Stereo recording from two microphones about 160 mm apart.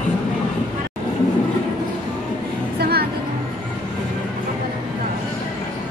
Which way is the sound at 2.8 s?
75° right (ahead or behind).